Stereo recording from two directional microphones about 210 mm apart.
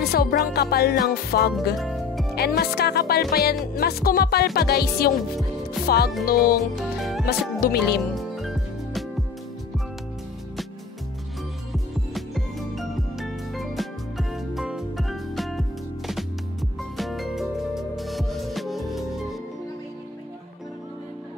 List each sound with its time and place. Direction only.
0.0 s music: 45° left (ahead or behind)
1.8 s music: centre (ahead or behind)
2.3 s music: 50° left (ahead or behind)
6.6 s music: centre (ahead or behind)
7.6 s music: 50° left (ahead or behind)
8.1 s music: centre (ahead or behind)
11.7 s music: centre (ahead or behind)
16.9 s music: centre (ahead or behind)